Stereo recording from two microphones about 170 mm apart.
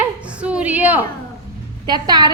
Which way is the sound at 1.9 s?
25° right (ahead or behind).